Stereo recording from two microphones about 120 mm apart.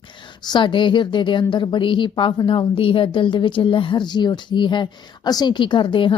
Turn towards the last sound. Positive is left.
turn(degrees=45)  # may be behind; listen again after turning